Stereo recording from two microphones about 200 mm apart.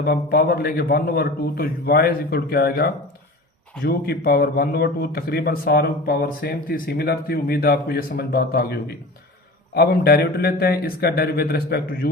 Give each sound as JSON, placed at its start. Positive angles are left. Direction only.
{"t": 0.0, "sound": "a man's voice", "side_deg": 50}